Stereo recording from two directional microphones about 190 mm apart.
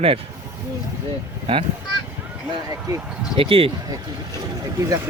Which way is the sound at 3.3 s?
30° right (ahead or behind).